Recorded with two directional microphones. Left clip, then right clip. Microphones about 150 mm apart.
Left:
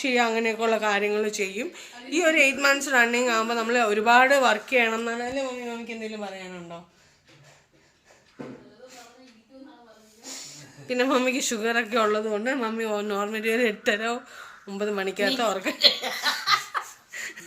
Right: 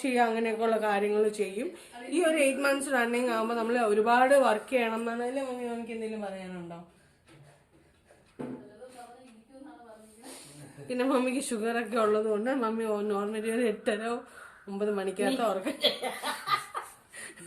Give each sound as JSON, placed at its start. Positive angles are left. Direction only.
{"t": 0.0, "sound": "speech", "side_deg": 20}
{"t": 5.3, "sound": "speech", "side_deg": 30}
{"t": 10.8, "sound": "speech", "side_deg": 30}
{"t": 12.6, "sound": "speech", "side_deg": 20}
{"t": 15.8, "sound": "laughter", "side_deg": -15}
{"t": 17.1, "sound": "a sound", "side_deg": 20}